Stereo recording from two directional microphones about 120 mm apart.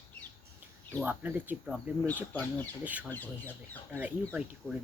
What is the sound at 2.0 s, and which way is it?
Speech, 15° left (ahead or behind).